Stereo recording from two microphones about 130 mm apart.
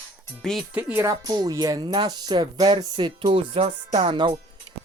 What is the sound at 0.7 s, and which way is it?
Speech, 15° right (ahead or behind).